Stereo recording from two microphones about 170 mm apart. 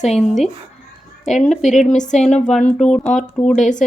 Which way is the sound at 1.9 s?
45° left (ahead or behind).